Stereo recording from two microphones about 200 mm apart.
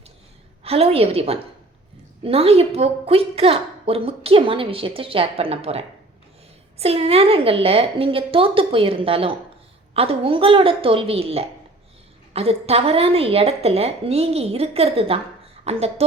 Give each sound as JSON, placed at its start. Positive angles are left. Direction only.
{"t": 0.6, "sound": "a woman's voice", "side_deg": -30}